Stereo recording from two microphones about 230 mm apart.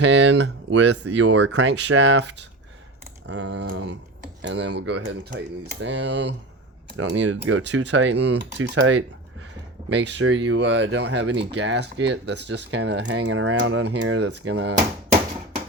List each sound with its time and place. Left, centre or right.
0.0 s speech: right
10.2 s speech: right